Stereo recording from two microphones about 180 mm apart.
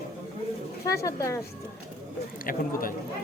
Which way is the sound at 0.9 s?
15° left (ahead or behind).